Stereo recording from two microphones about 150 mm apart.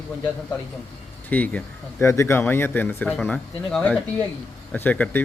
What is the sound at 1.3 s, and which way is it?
Speech, 10° left (ahead or behind).